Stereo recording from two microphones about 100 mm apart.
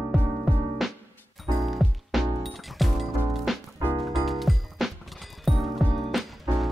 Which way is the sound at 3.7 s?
35° right (ahead or behind).